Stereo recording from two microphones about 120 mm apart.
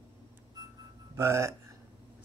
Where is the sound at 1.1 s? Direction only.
25° right (ahead or behind).